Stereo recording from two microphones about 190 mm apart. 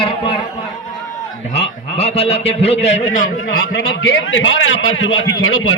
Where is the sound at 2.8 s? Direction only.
45° left (ahead or behind).